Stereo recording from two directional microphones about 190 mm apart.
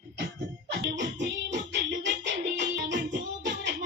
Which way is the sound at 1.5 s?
65° right (ahead or behind).